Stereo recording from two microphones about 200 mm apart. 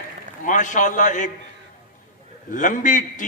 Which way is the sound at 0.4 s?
40° left (ahead or behind).